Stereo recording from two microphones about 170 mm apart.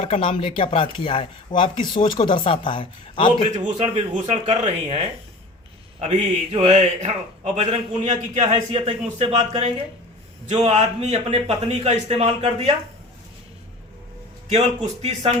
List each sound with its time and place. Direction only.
0.0 s speech: 30° left (ahead or behind)
3.8 s a man's voice: 40° right (ahead or behind)
14.5 s a man's voice: 40° right (ahead or behind)